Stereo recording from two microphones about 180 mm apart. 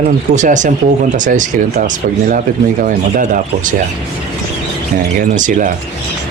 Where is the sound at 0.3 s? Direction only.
45° right (ahead or behind).